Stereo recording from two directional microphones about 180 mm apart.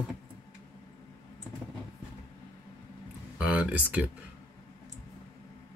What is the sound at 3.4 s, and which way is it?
Speech, 5° right (ahead or behind).